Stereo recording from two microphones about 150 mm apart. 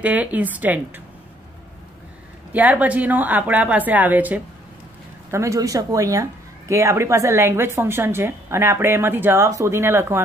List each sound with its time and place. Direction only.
0.0 s a woman's voice: 10° right (ahead or behind)
2.5 s a woman's voice: 10° right (ahead or behind)